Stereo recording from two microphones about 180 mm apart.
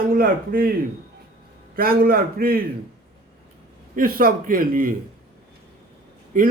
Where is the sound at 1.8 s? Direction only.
55° right (ahead or behind).